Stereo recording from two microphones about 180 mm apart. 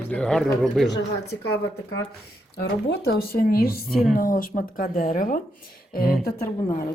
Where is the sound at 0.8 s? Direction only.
70° left (ahead or behind).